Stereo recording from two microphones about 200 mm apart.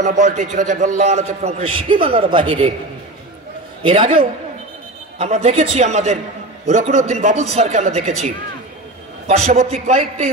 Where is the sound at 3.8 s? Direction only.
25° right (ahead or behind).